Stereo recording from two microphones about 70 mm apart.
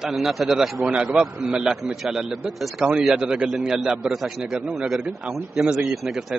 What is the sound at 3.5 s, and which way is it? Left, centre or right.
A woman's voice, centre.